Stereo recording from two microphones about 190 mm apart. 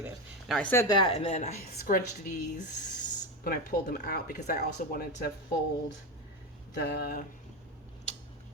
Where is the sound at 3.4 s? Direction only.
50° left (ahead or behind).